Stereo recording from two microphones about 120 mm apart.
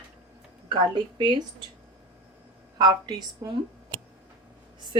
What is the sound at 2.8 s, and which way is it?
Speech, 35° right (ahead or behind).